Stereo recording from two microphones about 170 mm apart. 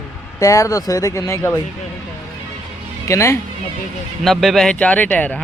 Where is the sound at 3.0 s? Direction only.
15° left (ahead or behind).